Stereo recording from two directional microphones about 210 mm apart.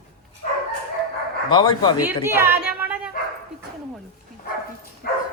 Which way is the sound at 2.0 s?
10° right (ahead or behind).